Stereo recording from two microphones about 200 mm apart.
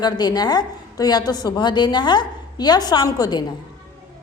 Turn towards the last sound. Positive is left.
turn(degrees=20)  # may be behind; listen again after turning